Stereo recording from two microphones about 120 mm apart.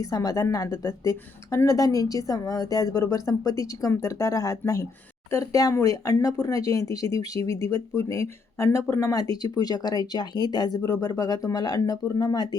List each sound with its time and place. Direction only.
0.0 s speech: 30° left (ahead or behind)